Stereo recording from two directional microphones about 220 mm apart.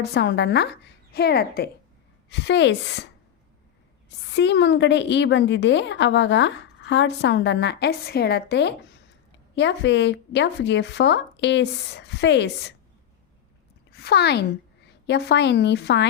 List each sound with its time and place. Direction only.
0.0 s a woman's voice: 50° left (ahead or behind)
4.3 s a woman's voice: 50° left (ahead or behind)
13.9 s a woman's voice: 45° left (ahead or behind)